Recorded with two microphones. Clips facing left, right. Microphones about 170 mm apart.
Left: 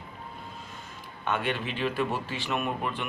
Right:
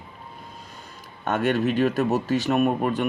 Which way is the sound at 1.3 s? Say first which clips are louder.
Right 8 dB; 45° right (ahead or behind).